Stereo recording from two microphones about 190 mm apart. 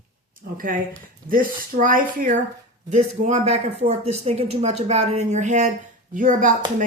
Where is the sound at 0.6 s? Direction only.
45° right (ahead or behind).